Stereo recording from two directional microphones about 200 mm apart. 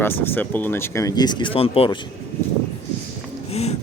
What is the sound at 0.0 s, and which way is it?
Speech, 10° left (ahead or behind).